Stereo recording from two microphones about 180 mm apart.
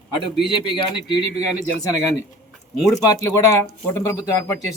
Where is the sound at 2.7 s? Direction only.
20° left (ahead or behind).